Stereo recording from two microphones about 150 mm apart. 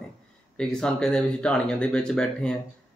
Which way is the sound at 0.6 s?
5° left (ahead or behind).